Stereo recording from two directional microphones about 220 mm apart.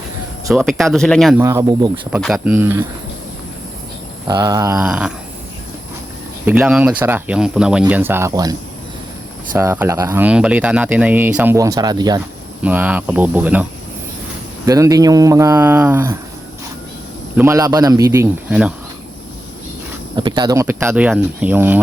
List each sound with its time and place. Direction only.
0.5 s speech: centre (ahead or behind)
1.4 s speech: 10° right (ahead or behind)
4.3 s speech: 15° right (ahead or behind)
4.8 s speech: 5° right (ahead or behind)
6.4 s speech: 5° right (ahead or behind)
12.6 s speech: 10° right (ahead or behind)
14.7 s speech: 15° right (ahead or behind)
17.3 s speech: 10° right (ahead or behind)
20.1 s speech: 20° right (ahead or behind)